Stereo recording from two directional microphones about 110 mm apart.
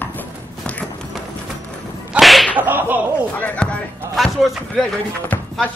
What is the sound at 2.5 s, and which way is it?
Whip, 15° right (ahead or behind).